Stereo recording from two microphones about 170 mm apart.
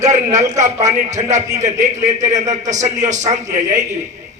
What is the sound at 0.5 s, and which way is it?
A man's voice, 45° right (ahead or behind).